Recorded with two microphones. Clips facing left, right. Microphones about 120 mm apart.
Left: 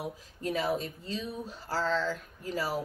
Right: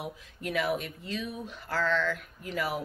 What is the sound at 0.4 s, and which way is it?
A woman's voice, 30° left (ahead or behind).